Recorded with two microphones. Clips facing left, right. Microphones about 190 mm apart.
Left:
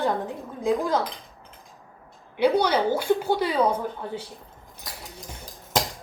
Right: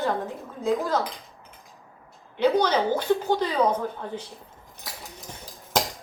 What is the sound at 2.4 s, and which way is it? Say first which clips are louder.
A woman's voice: left 1 dB; 10° left (ahead or behind).